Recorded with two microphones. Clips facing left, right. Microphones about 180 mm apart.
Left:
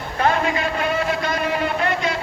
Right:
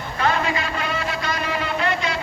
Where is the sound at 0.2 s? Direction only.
50° left (ahead or behind).